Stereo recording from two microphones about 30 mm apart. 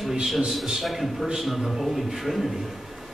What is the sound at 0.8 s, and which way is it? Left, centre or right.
A man's voice, centre.